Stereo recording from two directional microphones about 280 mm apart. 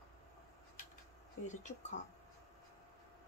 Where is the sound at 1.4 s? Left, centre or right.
Left.